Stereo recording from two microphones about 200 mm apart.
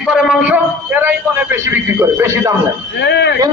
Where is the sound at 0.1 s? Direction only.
5° right (ahead or behind).